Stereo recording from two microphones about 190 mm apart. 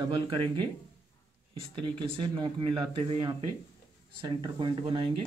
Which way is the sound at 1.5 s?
25° right (ahead or behind).